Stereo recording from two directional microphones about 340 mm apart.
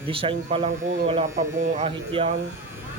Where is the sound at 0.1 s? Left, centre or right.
Centre.